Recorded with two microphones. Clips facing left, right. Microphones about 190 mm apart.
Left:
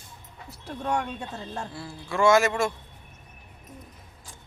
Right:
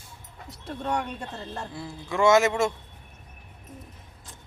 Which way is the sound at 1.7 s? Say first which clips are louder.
Right 1 dB; 20° right (ahead or behind).